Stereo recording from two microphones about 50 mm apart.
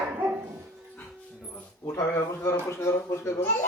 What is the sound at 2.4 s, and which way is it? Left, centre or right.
Speech, left.